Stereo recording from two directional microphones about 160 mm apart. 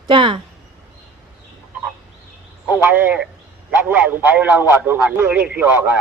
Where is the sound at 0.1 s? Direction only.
30° right (ahead or behind).